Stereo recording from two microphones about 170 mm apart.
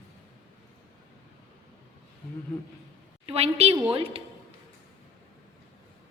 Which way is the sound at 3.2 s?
35° right (ahead or behind).